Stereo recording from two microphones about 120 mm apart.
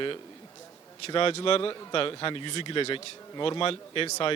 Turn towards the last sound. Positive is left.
turn(degrees=50)  # may be behind; listen again after turning